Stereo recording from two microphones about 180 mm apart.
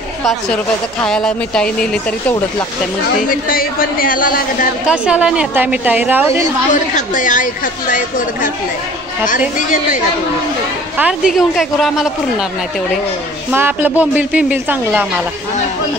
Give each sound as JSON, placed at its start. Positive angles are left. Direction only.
{"t": 0.2, "sound": "a woman's voice", "side_deg": 0}
{"t": 3.4, "sound": "a woman's voice", "side_deg": 55}
{"t": 4.8, "sound": "a woman's voice", "side_deg": -5}
{"t": 6.7, "sound": "a woman's voice", "side_deg": 45}
{"t": 11.0, "sound": "a woman's voice", "side_deg": -5}
{"t": 13.5, "sound": "a woman's voice", "side_deg": -10}